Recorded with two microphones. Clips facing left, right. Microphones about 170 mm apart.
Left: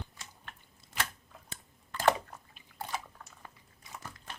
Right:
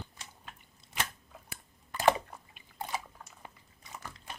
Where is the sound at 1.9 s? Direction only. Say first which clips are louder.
Right 1 dB; 10° right (ahead or behind).